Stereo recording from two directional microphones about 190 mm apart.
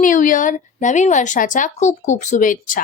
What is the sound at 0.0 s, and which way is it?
A woman's voice, 45° left (ahead or behind).